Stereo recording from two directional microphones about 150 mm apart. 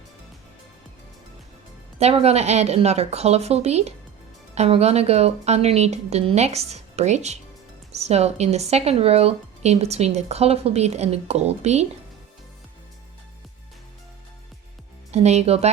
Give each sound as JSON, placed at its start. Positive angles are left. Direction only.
{"t": 2.0, "sound": "a woman's voice", "side_deg": -45}
{"t": 15.1, "sound": "a woman's voice", "side_deg": -45}